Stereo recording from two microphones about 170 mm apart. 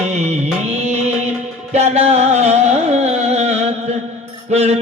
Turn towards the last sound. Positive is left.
turn(degrees=-40)  # may be behind; listen again after turning